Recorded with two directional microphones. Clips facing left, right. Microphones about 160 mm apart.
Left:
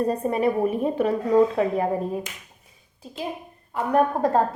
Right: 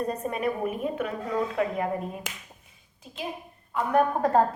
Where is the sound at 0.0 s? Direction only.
30° left (ahead or behind).